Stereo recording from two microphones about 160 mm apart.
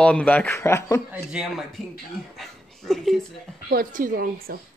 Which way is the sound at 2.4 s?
Centre (ahead or behind).